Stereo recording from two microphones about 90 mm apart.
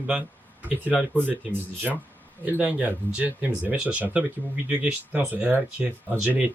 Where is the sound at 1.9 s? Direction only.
5° right (ahead or behind).